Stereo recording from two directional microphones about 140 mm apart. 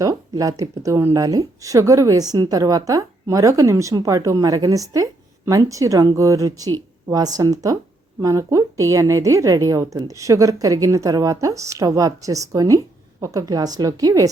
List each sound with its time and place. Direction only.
0.0 s a woman's voice: 25° right (ahead or behind)